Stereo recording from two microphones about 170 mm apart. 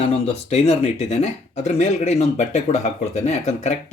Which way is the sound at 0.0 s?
35° left (ahead or behind).